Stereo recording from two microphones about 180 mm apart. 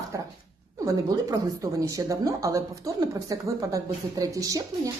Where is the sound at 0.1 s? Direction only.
20° right (ahead or behind).